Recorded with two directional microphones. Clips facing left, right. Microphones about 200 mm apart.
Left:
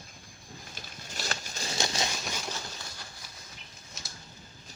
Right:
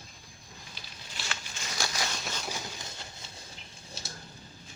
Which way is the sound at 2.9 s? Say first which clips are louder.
Right 2 dB; 25° right (ahead or behind).